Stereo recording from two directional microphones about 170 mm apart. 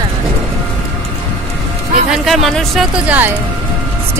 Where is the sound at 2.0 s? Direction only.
Centre (ahead or behind).